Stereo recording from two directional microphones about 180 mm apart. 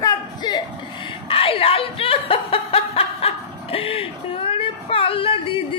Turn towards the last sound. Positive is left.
turn(degrees=30)  # may be behind; listen again after turning